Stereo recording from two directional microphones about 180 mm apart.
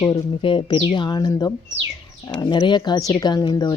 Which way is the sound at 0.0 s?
25° left (ahead or behind).